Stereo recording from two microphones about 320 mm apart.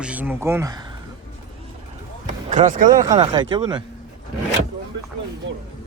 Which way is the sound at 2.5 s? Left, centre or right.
Right.